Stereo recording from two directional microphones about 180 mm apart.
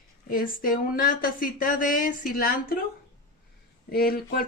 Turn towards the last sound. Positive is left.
turn(degrees=55)  # may be behind; listen again after turning